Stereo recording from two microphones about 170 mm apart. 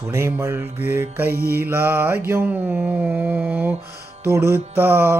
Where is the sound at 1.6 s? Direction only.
10° right (ahead or behind).